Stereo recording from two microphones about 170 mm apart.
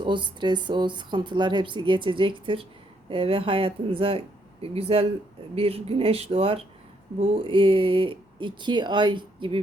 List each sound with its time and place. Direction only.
0.0 s speech: 30° right (ahead or behind)